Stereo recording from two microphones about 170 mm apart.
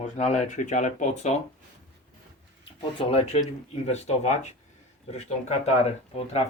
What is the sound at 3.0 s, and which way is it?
Speech, 35° left (ahead or behind).